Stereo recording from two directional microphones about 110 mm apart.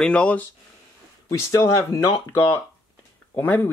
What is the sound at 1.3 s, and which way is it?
Speech, 25° left (ahead or behind).